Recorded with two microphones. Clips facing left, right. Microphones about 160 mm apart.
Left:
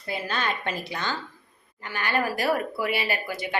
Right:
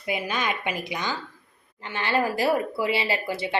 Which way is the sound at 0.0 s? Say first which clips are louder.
Right 2 dB; 15° right (ahead or behind).